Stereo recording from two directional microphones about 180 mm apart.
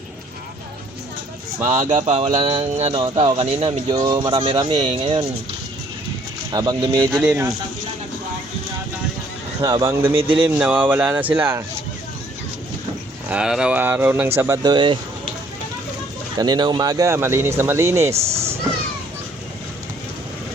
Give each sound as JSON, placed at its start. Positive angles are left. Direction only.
{"t": 1.7, "sound": "speech", "side_deg": -45}
{"t": 2.3, "sound": "speech", "side_deg": -30}
{"t": 3.7, "sound": "speech", "side_deg": -20}
{"t": 6.5, "sound": "speech", "side_deg": -20}
{"t": 9.6, "sound": "speech", "side_deg": -20}
{"t": 10.2, "sound": "speech", "side_deg": -30}
{"t": 10.4, "sound": "speech", "side_deg": -10}
{"t": 13.2, "sound": "speech", "side_deg": -5}
{"t": 16.4, "sound": "speech", "side_deg": -25}
{"t": 18.1, "sound": "speech", "side_deg": -35}